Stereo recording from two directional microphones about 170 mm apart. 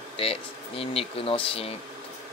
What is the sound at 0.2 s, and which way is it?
Speech, 35° left (ahead or behind).